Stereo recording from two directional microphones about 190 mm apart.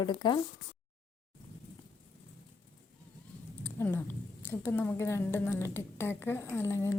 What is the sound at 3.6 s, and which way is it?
A woman's voice, 10° left (ahead or behind).